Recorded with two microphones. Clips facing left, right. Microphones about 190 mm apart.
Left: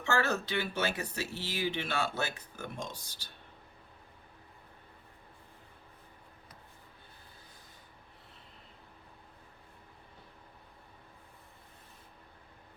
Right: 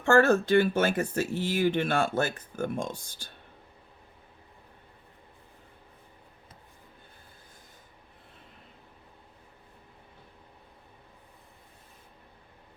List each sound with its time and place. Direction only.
0.0 s speech: 50° right (ahead or behind)